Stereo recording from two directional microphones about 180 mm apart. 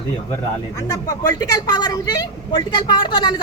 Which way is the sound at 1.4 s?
20° left (ahead or behind).